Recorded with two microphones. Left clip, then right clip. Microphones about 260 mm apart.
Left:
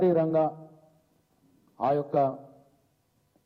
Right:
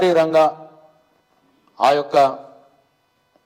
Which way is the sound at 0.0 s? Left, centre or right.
Centre.